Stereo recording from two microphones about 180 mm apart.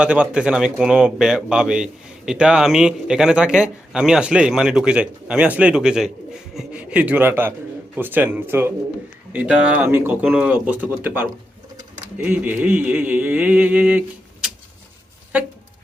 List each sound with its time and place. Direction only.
0.0 s speech: 5° right (ahead or behind)
15.3 s speech: 10° right (ahead or behind)